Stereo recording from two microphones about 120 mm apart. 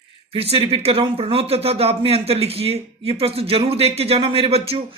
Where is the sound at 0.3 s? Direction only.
55° right (ahead or behind).